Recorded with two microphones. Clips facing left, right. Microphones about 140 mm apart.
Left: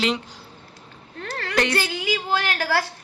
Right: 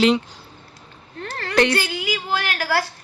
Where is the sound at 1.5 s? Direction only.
Centre (ahead or behind).